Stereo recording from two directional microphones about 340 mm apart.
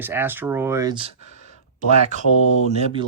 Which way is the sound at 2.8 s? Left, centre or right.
Centre.